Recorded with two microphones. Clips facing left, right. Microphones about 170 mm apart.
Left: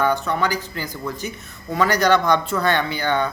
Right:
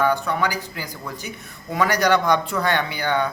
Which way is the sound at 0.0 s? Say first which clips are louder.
Even; 10° right (ahead or behind).